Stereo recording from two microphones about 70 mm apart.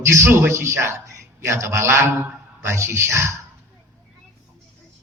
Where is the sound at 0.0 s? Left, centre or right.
Right.